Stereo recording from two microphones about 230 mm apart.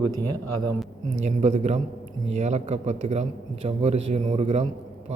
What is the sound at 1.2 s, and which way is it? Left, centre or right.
A man's voice, right.